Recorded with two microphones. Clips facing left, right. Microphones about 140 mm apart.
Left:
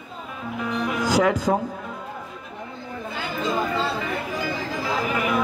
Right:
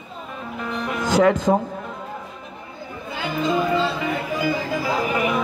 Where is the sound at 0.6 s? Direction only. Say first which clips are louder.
Left 1 dB; 10° left (ahead or behind).